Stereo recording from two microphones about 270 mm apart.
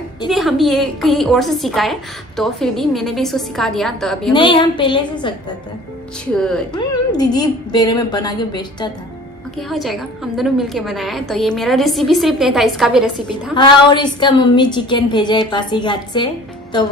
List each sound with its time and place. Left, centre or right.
0.3 s a woman's voice: centre
4.3 s a woman's voice: centre
6.3 s a woman's voice: centre
6.7 s a woman's voice: centre
9.6 s a woman's voice: centre
13.3 s a woman's voice: centre